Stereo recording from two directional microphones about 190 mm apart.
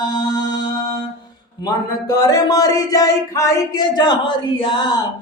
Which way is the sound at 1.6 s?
20° left (ahead or behind).